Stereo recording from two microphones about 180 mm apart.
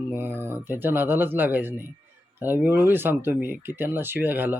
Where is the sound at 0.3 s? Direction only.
10° right (ahead or behind).